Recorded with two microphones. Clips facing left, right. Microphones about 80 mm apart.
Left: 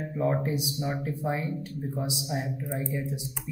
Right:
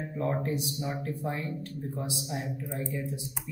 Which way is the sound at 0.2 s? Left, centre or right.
Centre.